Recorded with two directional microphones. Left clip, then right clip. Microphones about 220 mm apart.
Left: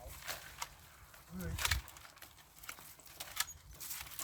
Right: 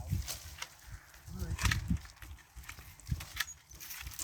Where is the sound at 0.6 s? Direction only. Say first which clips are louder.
Right 1 dB; 55° left (ahead or behind).